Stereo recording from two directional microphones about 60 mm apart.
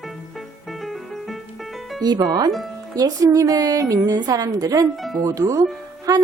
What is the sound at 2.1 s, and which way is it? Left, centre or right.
A woman's voice, right.